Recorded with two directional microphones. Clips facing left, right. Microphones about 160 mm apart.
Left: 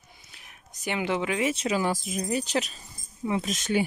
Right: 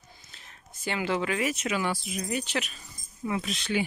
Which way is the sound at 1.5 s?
35° left (ahead or behind).